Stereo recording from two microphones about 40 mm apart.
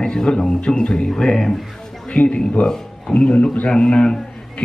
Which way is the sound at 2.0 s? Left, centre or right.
Left.